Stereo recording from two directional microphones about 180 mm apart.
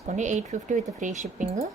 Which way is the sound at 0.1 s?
40° right (ahead or behind).